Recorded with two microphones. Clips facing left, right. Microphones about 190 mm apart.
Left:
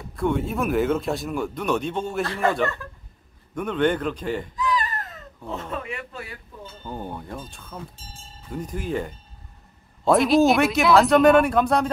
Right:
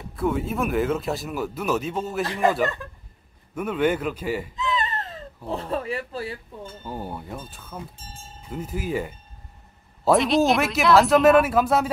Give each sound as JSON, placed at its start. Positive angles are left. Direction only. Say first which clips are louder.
{"t": 0.1, "sound": "speech", "louder": "left 1 dB", "side_deg": 0}
{"t": 2.2, "sound": "speech", "louder": "right 3 dB", "side_deg": -15}
{"t": 3.5, "sound": "speech", "louder": "left 1 dB", "side_deg": -5}
{"t": 4.6, "sound": "a sound", "louder": "left 1 dB", "side_deg": -25}
{"t": 6.8, "sound": "speech", "louder": "left 1 dB", "side_deg": -5}